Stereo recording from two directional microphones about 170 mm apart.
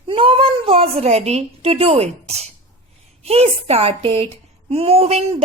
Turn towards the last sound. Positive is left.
turn(degrees=-35)  # may be behind; listen again after turning